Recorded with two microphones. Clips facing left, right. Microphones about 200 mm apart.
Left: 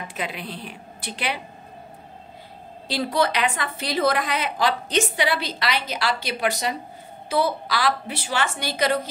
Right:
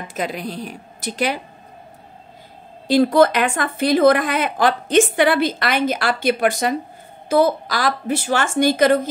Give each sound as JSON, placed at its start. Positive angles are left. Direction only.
{"t": 0.1, "sound": "a woman's voice", "side_deg": -45}
{"t": 2.9, "sound": "a woman's voice", "side_deg": -50}